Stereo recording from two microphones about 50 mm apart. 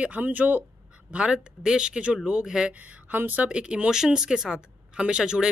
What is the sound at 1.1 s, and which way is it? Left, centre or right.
Speech, right.